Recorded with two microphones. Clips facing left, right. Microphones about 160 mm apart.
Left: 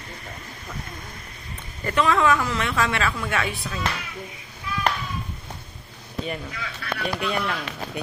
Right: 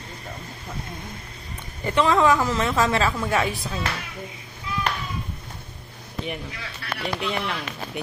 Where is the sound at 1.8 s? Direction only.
25° right (ahead or behind).